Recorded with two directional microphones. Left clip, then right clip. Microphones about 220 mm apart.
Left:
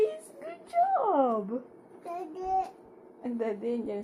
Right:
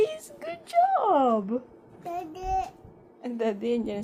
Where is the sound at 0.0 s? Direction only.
50° right (ahead or behind).